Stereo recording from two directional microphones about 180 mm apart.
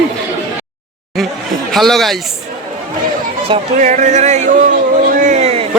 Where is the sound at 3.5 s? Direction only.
40° right (ahead or behind).